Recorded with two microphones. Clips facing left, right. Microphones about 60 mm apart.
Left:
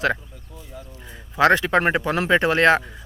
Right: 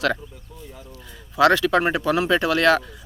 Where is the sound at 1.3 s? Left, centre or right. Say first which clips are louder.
Even; left.